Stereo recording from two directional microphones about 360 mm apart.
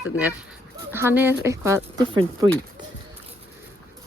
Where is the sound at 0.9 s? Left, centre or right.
Centre.